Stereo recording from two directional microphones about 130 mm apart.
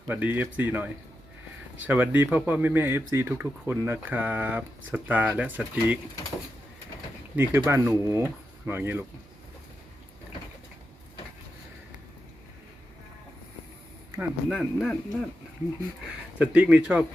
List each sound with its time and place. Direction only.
0.1 s speech: 15° right (ahead or behind)
7.6 s speech: 20° right (ahead or behind)
14.2 s speech: 5° right (ahead or behind)
16.4 s speech: 10° right (ahead or behind)